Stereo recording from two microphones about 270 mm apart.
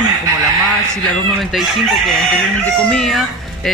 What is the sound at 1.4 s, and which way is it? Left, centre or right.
Speech, centre.